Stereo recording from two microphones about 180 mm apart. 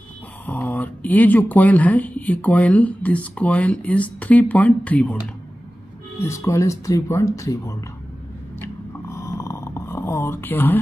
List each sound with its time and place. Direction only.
0.5 s speech: 10° left (ahead or behind)
6.2 s speech: 15° left (ahead or behind)
9.1 s snoring: 15° left (ahead or behind)